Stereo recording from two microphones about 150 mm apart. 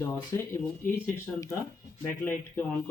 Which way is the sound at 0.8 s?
65° left (ahead or behind).